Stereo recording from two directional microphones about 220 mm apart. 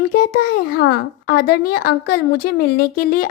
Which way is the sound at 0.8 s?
45° left (ahead or behind).